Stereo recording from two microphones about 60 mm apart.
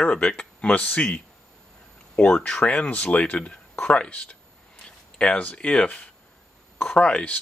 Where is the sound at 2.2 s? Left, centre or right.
Left.